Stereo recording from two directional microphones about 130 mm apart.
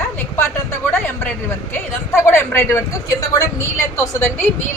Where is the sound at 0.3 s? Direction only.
20° left (ahead or behind).